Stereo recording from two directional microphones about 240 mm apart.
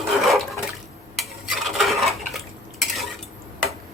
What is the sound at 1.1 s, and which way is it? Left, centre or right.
Dishes, centre.